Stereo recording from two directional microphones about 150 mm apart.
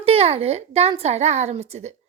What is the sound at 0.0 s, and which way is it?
Speech, 40° right (ahead or behind).